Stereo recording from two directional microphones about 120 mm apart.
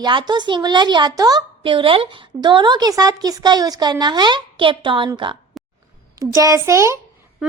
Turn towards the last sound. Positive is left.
turn(degrees=-5)  # may be behind; listen again after turning